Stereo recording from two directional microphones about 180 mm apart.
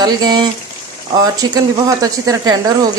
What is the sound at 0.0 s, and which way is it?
Speech, 25° right (ahead or behind).